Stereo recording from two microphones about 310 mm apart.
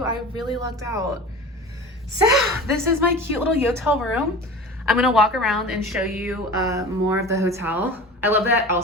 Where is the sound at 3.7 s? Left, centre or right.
Centre.